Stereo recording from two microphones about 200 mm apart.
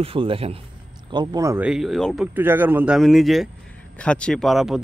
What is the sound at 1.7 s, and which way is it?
Speech, centre (ahead or behind).